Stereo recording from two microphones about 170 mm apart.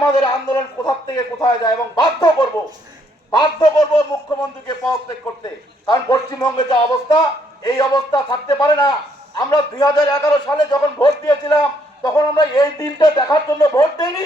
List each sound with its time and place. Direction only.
0.0 s a man's voice: 25° left (ahead or behind)